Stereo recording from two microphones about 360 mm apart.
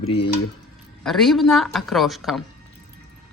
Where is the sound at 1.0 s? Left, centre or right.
Centre.